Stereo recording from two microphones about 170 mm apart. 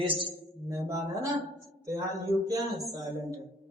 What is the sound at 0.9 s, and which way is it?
A man's voice, 20° right (ahead or behind).